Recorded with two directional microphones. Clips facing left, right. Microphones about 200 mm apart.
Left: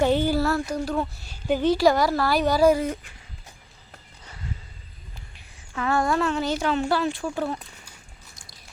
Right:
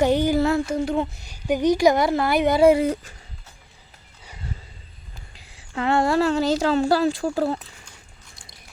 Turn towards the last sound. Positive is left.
turn(degrees=-35)  # may be behind; listen again after turning